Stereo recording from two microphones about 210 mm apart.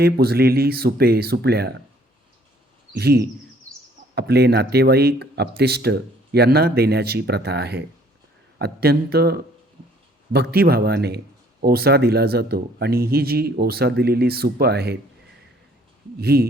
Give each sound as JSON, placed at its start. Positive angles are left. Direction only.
{"t": 0.0, "sound": "speech", "side_deg": -50}
{"t": 2.9, "sound": "speech", "side_deg": -50}
{"t": 16.2, "sound": "speech", "side_deg": -50}